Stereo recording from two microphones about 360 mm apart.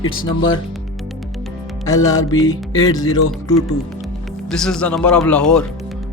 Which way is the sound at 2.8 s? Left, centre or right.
Centre.